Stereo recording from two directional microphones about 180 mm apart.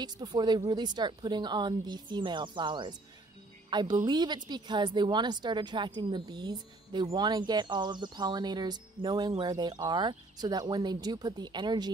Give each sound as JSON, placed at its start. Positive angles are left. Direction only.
{"t": 0.0, "sound": "speech", "side_deg": -25}